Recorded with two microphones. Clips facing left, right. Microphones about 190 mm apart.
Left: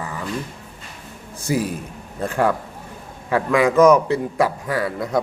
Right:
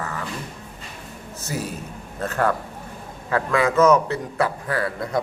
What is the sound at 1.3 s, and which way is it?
A man's voice, 10° left (ahead or behind).